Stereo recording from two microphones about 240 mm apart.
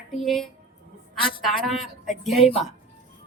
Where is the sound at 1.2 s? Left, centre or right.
Left.